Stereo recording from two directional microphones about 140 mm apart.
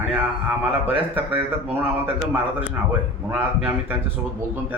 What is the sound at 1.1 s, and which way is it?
Speech, 15° right (ahead or behind).